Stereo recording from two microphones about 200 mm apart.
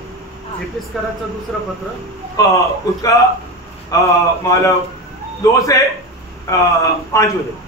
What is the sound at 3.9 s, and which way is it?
Speech, 15° left (ahead or behind).